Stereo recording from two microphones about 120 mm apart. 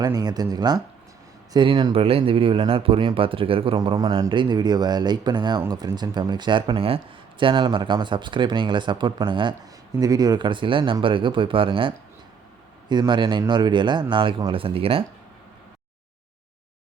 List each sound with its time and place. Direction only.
0.0 s speech: 30° right (ahead or behind); by 3.8 s 50° right (ahead or behind)
4.3 s speech: 40° right (ahead or behind)